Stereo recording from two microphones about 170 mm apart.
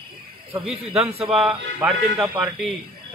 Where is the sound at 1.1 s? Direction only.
35° right (ahead or behind).